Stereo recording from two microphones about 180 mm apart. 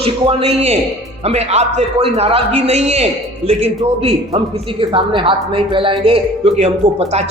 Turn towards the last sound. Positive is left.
turn(degrees=-35)  # may be behind; listen again after turning